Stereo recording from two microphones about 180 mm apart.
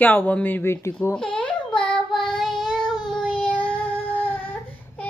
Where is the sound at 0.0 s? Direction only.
10° left (ahead or behind).